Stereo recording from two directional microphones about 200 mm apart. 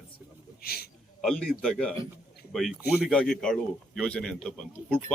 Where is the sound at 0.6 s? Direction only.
50° left (ahead or behind).